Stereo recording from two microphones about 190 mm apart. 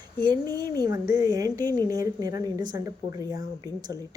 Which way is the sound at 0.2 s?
20° right (ahead or behind).